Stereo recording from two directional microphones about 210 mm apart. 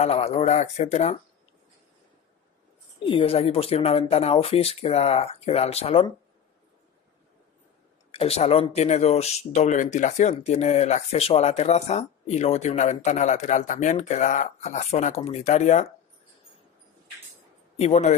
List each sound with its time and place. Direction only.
0.0 s speech: 30° left (ahead or behind)
3.0 s speech: 25° left (ahead or behind)
8.1 s speech: 30° left (ahead or behind)
17.7 s speech: 30° left (ahead or behind)